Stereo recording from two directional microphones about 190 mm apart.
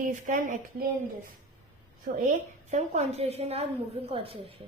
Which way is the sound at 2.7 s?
35° right (ahead or behind).